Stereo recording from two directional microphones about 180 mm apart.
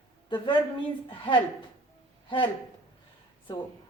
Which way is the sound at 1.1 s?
25° left (ahead or behind).